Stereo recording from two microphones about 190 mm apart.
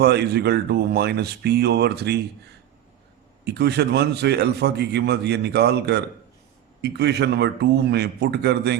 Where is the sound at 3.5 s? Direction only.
60° right (ahead or behind).